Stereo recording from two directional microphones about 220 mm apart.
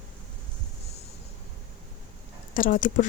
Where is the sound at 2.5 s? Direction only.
35° left (ahead or behind).